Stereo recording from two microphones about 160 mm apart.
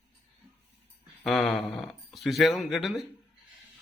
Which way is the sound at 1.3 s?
Centre (ahead or behind).